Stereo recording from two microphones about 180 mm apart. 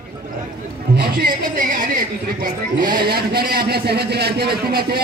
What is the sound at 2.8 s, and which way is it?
A man's voice, 55° right (ahead or behind).